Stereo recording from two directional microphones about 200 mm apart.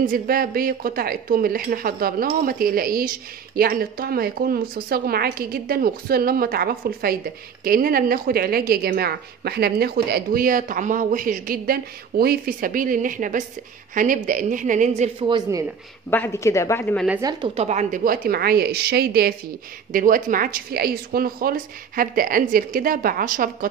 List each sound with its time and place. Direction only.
0.0 s a woman's voice: 45° right (ahead or behind); by 15.6 s 25° right (ahead or behind)
16.1 s speech: 10° left (ahead or behind)
16.9 s speech: centre (ahead or behind)
17.2 s speech: 20° right (ahead or behind)
17.6 s a woman's voice: 40° right (ahead or behind)